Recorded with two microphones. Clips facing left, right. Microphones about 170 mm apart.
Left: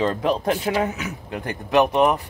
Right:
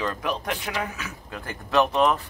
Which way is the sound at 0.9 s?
20° left (ahead or behind).